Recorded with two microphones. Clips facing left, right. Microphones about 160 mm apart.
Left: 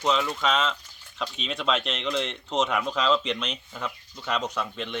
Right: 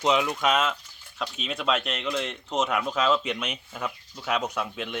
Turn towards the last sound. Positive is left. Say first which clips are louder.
# even
turn(degrees=-5)  # may be behind; listen again after turning